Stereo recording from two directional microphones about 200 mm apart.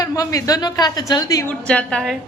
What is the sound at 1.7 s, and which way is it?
Speech, 5° left (ahead or behind).